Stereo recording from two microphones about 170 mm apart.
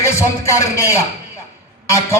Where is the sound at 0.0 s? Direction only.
15° left (ahead or behind).